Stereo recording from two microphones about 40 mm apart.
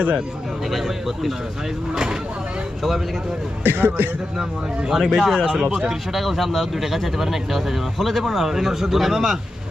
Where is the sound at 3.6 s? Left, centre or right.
Right.